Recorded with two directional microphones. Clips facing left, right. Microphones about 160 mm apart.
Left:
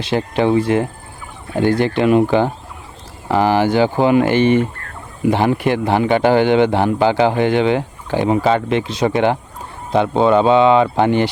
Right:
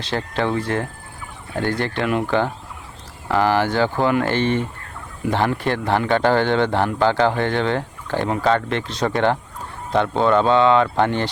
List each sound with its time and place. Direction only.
0.0 s a man's voice: 15° left (ahead or behind)